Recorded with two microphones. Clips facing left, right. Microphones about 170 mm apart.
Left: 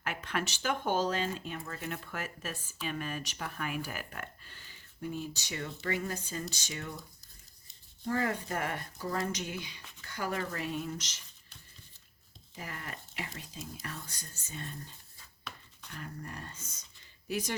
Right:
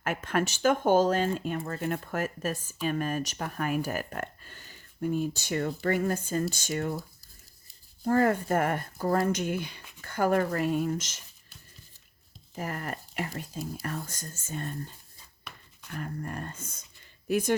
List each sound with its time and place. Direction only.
0.0 s speech: 45° right (ahead or behind)
8.0 s speech: 50° right (ahead or behind)
12.5 s speech: 45° right (ahead or behind)